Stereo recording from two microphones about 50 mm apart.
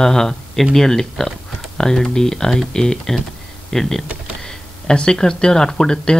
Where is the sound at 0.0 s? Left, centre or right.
Centre.